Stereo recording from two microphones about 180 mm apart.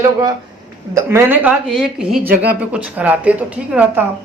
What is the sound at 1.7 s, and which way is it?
A woman's voice, centre (ahead or behind).